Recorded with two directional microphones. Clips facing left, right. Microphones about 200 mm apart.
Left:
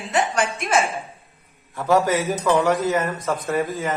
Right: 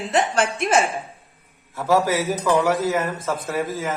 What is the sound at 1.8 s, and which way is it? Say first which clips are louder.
A man's voice: left 1 dB; centre (ahead or behind).